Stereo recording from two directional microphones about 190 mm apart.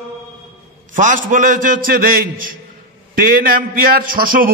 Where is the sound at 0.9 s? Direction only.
45° right (ahead or behind).